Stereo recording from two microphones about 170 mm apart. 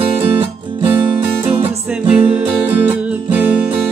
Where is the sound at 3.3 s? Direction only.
5° right (ahead or behind).